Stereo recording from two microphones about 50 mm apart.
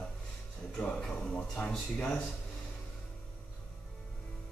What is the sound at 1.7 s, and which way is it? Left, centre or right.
Speech, centre.